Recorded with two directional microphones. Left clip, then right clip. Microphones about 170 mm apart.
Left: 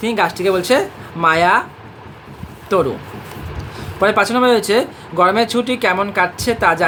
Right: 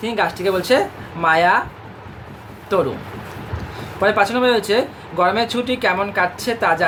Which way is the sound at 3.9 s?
35° left (ahead or behind).